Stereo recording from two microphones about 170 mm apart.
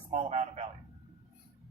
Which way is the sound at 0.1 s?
40° right (ahead or behind).